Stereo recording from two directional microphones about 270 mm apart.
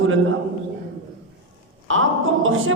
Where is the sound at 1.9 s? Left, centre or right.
Right.